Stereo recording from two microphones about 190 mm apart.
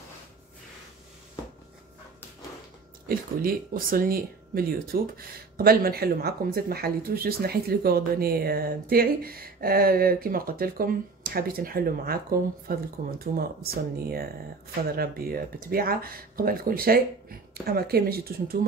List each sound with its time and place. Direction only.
3.1 s speech: 50° right (ahead or behind)